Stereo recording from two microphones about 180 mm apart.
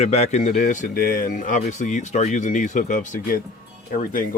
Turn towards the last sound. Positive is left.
turn(degrees=50)  # may be behind; listen again after turning